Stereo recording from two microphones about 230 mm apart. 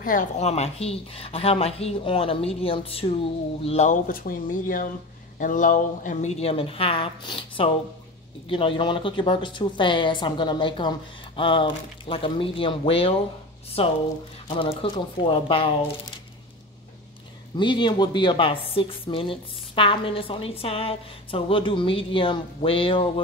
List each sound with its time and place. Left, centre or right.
0.0 s speech: left
17.6 s speech: left